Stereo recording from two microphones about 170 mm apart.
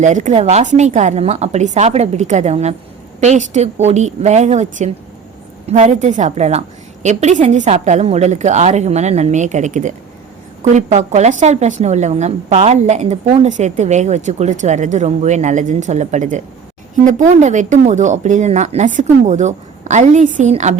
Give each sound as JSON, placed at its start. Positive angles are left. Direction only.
{"t": 0.0, "sound": "a woman's voice", "side_deg": -45}